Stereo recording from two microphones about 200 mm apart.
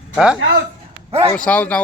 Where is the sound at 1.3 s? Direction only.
5° left (ahead or behind).